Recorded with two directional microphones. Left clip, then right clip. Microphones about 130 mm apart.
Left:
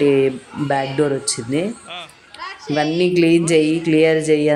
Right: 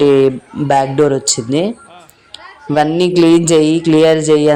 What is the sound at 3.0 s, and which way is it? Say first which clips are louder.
Speech: right 3 dB; 25° right (ahead or behind).